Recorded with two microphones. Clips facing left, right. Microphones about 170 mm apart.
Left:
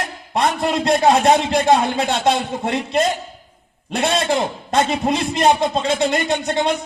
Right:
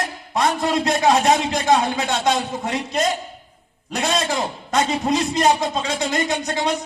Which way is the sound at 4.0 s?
65° left (ahead or behind).